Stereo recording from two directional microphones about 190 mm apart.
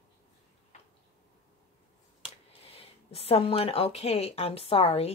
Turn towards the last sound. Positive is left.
turn(degrees=30)  # may be behind; listen again after turning